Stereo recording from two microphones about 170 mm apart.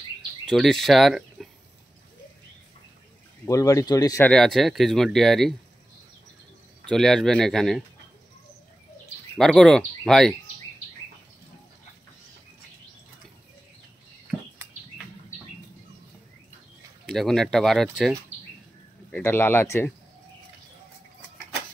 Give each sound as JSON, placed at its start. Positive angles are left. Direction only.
{"t": 0.5, "sound": "speech", "side_deg": 0}
{"t": 3.4, "sound": "speech", "side_deg": 20}
{"t": 4.3, "sound": "speech", "side_deg": 0}
{"t": 6.9, "sound": "speech", "side_deg": 5}
{"t": 9.4, "sound": "speech", "side_deg": 5}
{"t": 17.0, "sound": "speech", "side_deg": 0}
{"t": 19.1, "sound": "speech", "side_deg": 10}